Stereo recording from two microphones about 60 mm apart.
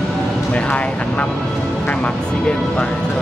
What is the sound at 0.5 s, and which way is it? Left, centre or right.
Speech, left.